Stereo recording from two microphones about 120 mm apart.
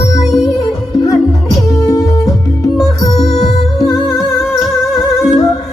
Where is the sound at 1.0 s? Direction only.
30° left (ahead or behind).